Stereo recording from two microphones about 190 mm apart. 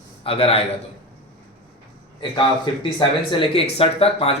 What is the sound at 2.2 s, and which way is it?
Speech, 25° left (ahead or behind).